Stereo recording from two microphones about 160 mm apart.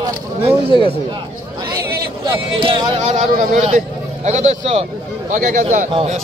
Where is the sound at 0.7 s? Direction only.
30° left (ahead or behind).